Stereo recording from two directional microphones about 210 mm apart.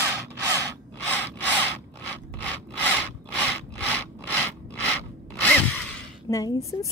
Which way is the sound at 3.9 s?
10° left (ahead or behind).